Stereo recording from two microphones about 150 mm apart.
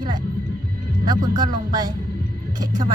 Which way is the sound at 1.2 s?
25° right (ahead or behind).